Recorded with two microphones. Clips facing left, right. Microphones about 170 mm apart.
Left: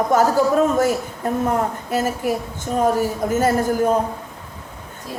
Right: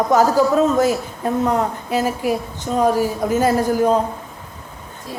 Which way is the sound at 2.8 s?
45° left (ahead or behind).